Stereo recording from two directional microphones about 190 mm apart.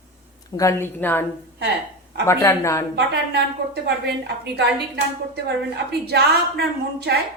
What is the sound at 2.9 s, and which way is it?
A woman's voice, 60° right (ahead or behind).